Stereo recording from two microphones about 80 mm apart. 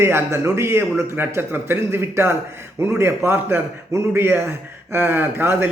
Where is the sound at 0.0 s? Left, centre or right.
Right.